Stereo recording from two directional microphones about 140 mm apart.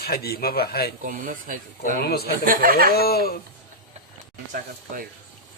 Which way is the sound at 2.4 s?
85° right.